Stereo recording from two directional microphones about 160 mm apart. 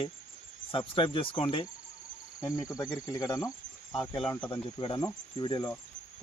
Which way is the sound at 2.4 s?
20° left (ahead or behind).